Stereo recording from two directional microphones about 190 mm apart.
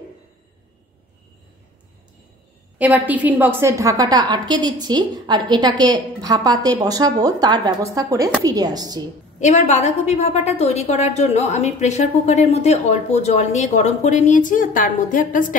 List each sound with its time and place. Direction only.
2.8 s a woman's voice: 10° right (ahead or behind)
9.4 s a woman's voice: 35° left (ahead or behind)